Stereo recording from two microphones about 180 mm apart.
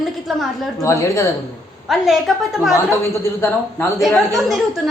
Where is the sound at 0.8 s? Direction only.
15° left (ahead or behind).